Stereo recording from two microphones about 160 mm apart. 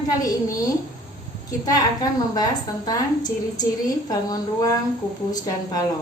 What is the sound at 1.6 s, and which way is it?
A woman's voice, 25° left (ahead or behind).